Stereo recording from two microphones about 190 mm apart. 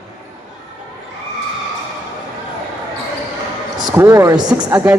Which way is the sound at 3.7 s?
20° right (ahead or behind).